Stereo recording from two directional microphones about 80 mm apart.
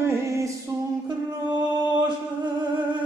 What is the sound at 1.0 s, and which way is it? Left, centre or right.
Music, right.